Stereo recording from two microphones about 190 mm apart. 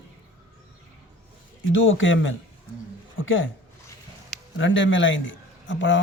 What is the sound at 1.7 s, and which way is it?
Speech, 90° left.